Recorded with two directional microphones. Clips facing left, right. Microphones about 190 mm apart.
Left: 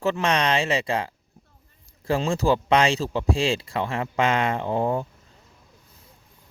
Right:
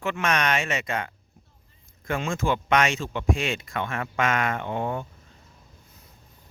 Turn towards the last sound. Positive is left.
turn(degrees=35)  # may be behind; listen again after turning